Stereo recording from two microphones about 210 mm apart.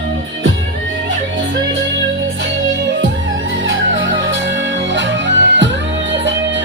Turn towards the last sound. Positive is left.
turn(degrees=-60)  # may be behind; listen again after turning